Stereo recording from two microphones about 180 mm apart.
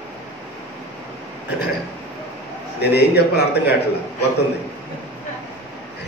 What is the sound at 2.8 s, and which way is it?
Speech, 65° left (ahead or behind).